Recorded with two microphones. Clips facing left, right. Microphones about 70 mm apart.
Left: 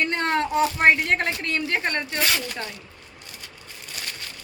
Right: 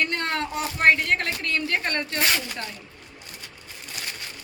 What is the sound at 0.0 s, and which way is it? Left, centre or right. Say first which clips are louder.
Speech: left 3 dB; left.